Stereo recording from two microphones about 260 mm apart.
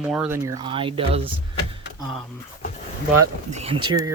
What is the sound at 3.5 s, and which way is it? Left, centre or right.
Speech, right.